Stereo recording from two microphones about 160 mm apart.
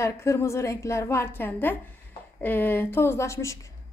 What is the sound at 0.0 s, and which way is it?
A woman's voice, 20° left (ahead or behind).